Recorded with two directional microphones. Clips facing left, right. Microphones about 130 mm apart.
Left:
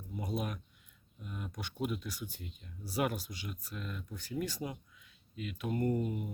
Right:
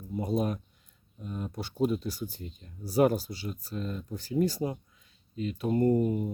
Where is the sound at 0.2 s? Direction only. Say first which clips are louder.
Right 8 dB; 35° right (ahead or behind).